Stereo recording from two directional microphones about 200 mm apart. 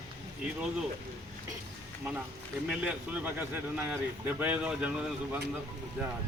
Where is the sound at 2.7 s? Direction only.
5° right (ahead or behind).